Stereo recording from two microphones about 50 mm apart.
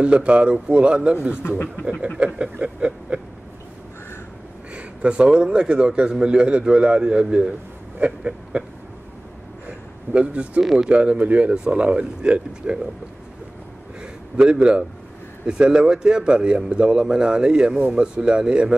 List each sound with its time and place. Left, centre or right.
0.0 s a man's voice: right
1.4 s speech: left
2.1 s a man's voice: right
2.6 s a sound: right
4.7 s a man's voice: right
9.7 s a sound: right
10.6 s speech: centre
10.9 s a man's voice: right
11.5 s a man's voice: centre
14.3 s a man's voice: right